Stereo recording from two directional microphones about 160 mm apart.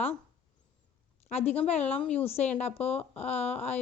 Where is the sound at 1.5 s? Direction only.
40° left (ahead or behind).